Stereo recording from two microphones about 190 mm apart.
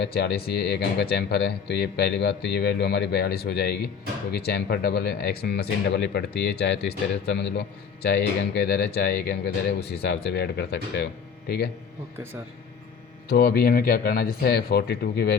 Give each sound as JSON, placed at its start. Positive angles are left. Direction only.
{"t": 0.0, "sound": "speech", "side_deg": 65}
{"t": 13.2, "sound": "speech", "side_deg": 55}